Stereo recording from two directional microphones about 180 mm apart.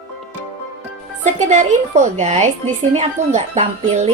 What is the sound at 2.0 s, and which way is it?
Speech, 40° right (ahead or behind).